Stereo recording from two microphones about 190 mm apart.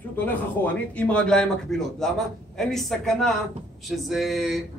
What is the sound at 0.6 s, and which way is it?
A man's voice, 10° left (ahead or behind).